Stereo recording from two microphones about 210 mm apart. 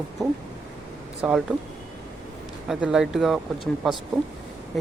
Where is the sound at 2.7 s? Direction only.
Centre (ahead or behind).